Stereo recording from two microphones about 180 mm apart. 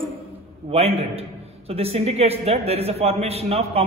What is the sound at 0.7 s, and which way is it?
A man's voice, 35° right (ahead or behind).